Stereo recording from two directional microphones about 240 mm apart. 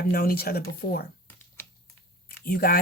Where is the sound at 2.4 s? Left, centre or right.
Left.